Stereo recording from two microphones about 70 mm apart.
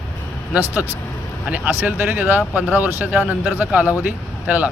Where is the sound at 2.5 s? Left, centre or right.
Left.